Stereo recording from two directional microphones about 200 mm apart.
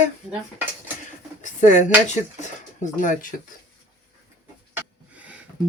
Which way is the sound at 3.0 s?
40° left (ahead or behind).